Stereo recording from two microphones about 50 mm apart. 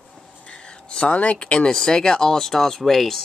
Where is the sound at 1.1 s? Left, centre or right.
Left.